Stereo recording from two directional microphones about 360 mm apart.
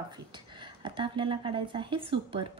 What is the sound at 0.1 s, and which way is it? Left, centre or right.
Speech, centre.